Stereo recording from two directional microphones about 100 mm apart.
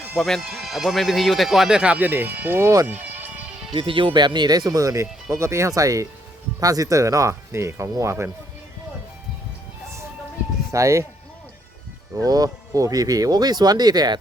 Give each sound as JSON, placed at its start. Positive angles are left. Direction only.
{"t": 0.1, "sound": "speech", "side_deg": 0}
{"t": 2.9, "sound": "music", "side_deg": -15}
{"t": 3.7, "sound": "speech", "side_deg": -60}
{"t": 10.7, "sound": "speech", "side_deg": -30}
{"t": 12.2, "sound": "speech", "side_deg": -35}